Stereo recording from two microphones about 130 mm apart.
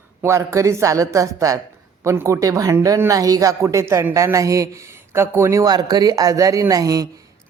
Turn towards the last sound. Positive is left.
turn(degrees=-25)  # may be behind; listen again after turning